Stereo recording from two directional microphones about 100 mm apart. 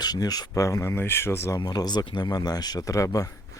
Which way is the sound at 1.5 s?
45° left (ahead or behind).